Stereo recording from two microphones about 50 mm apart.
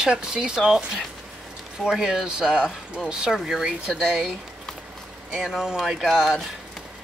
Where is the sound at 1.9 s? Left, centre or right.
Centre.